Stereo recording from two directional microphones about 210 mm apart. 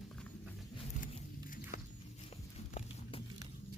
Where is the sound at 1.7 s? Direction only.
40° left (ahead or behind).